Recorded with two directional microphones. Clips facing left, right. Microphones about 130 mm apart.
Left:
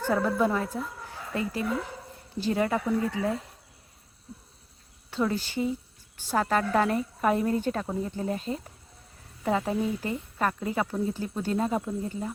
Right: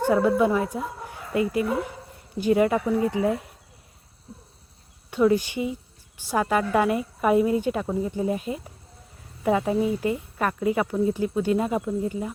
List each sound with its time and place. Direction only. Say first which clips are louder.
0.0 s speech: right 5 dB; 10° right (ahead or behind)
4.3 s a sound: right 1 dB; 30° right (ahead or behind)
5.1 s speech: right 7 dB; 15° right (ahead or behind)
9.7 s speech: right 5 dB; 20° right (ahead or behind)
10.3 s speech: right 2 dB; 5° right (ahead or behind)